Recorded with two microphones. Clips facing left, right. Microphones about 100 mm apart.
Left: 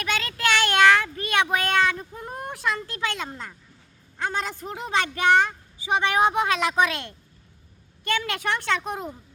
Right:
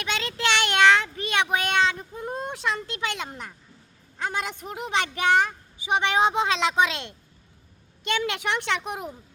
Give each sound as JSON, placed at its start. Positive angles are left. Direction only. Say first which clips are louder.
{"t": 0.0, "sound": "child singing", "louder": "left 1 dB", "side_deg": -20}
{"t": 4.3, "sound": "a woman's voice", "louder": "left 1 dB", "side_deg": -15}